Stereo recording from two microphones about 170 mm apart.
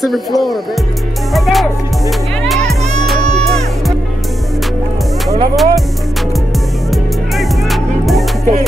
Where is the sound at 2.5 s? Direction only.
Centre (ahead or behind).